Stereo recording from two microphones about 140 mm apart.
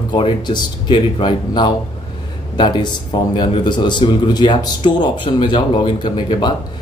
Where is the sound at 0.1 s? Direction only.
35° left (ahead or behind).